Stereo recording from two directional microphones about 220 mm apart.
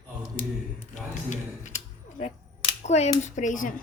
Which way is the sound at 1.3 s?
35° left (ahead or behind).